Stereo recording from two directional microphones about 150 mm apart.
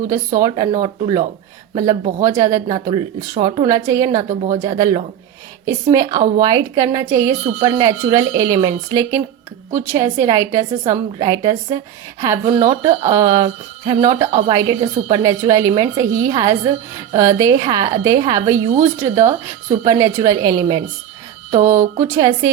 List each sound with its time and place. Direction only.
0.3 s a woman's voice: 25° right (ahead or behind)
4.3 s speech: 55° right (ahead or behind)
4.6 s a woman's voice: 25° right (ahead or behind)